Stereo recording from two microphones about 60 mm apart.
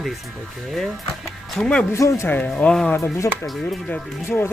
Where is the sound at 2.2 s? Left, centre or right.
Left.